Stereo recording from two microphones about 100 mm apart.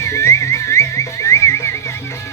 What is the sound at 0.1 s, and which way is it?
Music, 30° left (ahead or behind).